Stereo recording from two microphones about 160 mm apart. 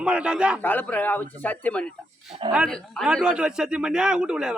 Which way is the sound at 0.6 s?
10° left (ahead or behind).